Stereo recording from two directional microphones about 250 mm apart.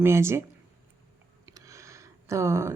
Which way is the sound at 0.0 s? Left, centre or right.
Centre.